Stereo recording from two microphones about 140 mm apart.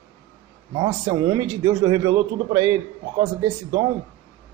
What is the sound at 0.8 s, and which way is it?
Speech, 30° right (ahead or behind).